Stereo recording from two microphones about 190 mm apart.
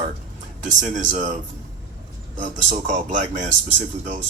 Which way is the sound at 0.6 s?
40° right (ahead or behind).